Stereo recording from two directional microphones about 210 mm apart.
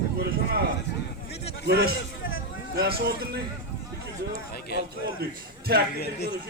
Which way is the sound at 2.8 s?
50° right (ahead or behind).